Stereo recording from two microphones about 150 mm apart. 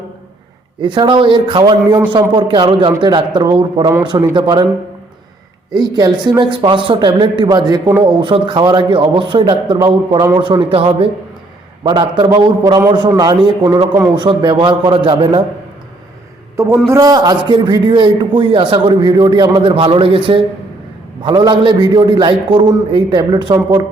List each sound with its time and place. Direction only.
0.8 s a man's voice: 30° right (ahead or behind)
5.7 s a man's voice: 30° right (ahead or behind)
7.5 s a man's voice: 20° right (ahead or behind)
8.0 s a man's voice: 35° right (ahead or behind)
9.7 s a man's voice: 25° right (ahead or behind)
16.9 s a man's voice: 25° right (ahead or behind)